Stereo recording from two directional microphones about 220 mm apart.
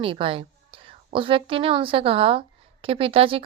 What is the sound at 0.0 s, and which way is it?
A woman's voice, 25° right (ahead or behind).